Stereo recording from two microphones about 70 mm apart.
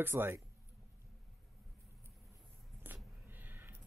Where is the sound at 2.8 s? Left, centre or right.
Right.